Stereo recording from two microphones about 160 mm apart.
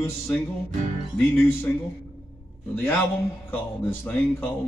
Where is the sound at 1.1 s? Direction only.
15° left (ahead or behind).